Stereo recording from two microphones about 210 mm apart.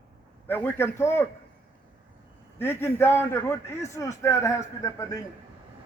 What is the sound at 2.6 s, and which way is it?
A man's voice, 10° left (ahead or behind).